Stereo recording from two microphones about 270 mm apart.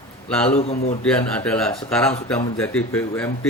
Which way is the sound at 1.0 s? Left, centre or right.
Centre.